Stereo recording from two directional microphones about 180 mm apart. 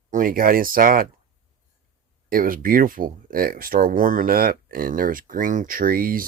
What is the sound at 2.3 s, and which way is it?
Speech, 50° right (ahead or behind).